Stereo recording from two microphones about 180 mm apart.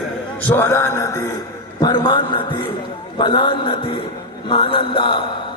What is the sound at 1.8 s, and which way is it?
A woman's voice, 25° left (ahead or behind).